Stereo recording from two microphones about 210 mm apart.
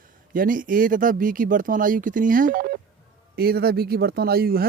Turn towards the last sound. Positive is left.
turn(degrees=-45)  # may be behind; listen again after turning